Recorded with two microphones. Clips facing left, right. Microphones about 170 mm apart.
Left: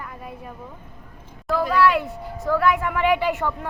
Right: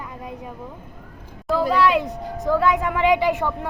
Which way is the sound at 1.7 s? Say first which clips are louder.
Even; 15° right (ahead or behind).